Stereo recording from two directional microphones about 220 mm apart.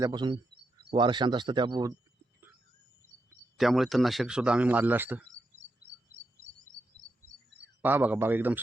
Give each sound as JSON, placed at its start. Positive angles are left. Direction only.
{"t": 0.0, "sound": "speech", "side_deg": -20}
{"t": 3.6, "sound": "speech", "side_deg": 0}
{"t": 7.8, "sound": "a man's voice", "side_deg": -10}